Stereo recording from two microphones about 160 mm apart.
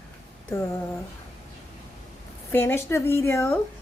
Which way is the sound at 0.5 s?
15° left (ahead or behind).